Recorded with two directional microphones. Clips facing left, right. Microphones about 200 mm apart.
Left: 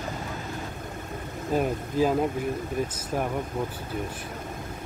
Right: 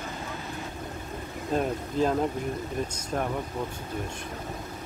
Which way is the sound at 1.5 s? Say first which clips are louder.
Left 2 dB; 5° left (ahead or behind).